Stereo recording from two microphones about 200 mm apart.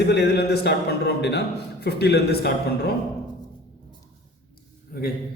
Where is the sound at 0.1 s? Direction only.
55° left (ahead or behind).